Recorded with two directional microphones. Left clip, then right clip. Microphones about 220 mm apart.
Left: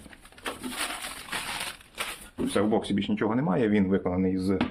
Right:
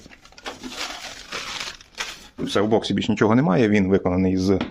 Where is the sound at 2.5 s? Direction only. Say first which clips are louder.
Right 6 dB; 50° right (ahead or behind).